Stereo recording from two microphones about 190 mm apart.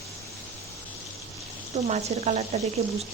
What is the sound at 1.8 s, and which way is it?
Speech, 35° right (ahead or behind).